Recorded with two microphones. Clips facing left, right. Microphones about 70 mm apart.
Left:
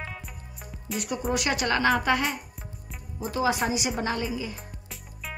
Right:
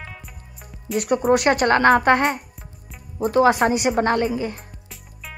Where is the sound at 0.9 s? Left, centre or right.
Right.